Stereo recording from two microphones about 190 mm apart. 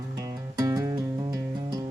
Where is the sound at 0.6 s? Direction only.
15° right (ahead or behind).